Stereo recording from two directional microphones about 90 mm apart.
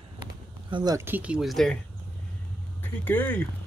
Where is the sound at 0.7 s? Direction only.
60° right (ahead or behind).